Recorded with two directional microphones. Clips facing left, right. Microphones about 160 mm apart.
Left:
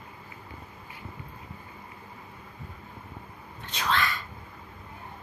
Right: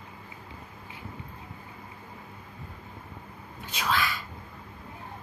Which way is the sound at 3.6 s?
5° right (ahead or behind).